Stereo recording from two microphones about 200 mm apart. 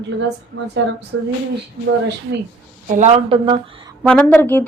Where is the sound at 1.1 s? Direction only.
80° right.